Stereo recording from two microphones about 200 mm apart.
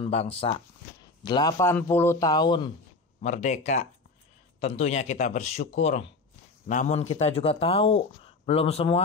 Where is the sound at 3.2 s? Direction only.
35° left (ahead or behind).